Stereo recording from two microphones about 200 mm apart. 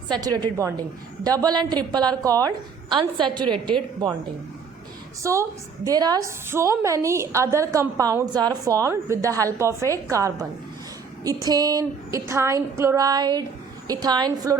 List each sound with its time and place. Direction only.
0.1 s a woman's voice: 20° right (ahead or behind)
5.2 s a woman's voice: 15° right (ahead or behind)
11.4 s a woman's voice: 20° right (ahead or behind)